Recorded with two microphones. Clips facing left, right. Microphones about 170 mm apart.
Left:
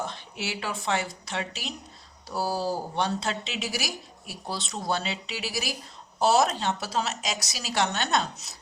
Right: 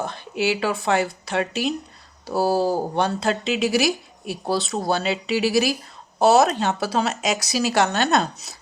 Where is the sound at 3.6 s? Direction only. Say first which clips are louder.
Right 12 dB; 65° right (ahead or behind).